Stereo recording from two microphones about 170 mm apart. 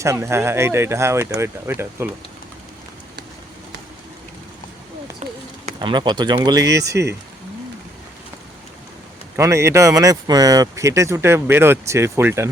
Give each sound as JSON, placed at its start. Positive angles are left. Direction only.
{"t": 0.0, "sound": "speech", "side_deg": -15}
{"t": 5.2, "sound": "a sound", "side_deg": -40}
{"t": 5.6, "sound": "speech", "side_deg": -30}
{"t": 9.3, "sound": "speech", "side_deg": -15}